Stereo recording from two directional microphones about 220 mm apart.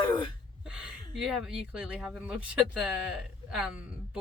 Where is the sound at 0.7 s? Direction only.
5° right (ahead or behind).